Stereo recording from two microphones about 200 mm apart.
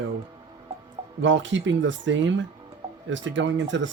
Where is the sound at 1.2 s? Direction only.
65° right (ahead or behind).